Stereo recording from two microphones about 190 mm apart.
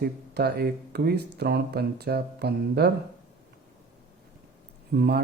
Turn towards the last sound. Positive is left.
turn(degrees=-55)  # may be behind; listen again after turning